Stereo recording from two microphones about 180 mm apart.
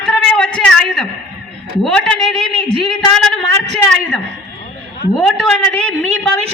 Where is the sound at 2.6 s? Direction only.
30° right (ahead or behind).